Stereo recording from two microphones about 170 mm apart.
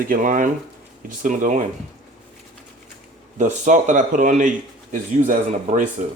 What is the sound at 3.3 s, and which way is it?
A man's voice, 45° right (ahead or behind).